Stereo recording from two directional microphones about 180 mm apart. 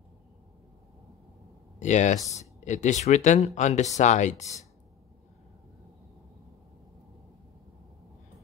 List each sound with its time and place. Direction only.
1.8 s speech: 40° left (ahead or behind)